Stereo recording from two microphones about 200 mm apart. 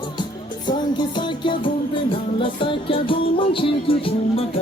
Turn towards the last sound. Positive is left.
turn(degrees=25)  # may be behind; listen again after turning